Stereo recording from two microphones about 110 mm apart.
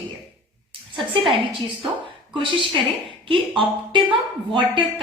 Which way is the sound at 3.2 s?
50° right (ahead or behind).